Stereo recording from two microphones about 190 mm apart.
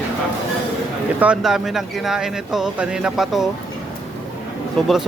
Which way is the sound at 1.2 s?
5° right (ahead or behind).